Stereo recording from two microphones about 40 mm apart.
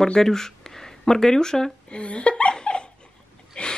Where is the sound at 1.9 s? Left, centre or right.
Left.